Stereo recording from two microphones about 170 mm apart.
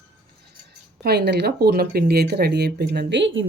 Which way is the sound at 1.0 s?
75° right (ahead or behind).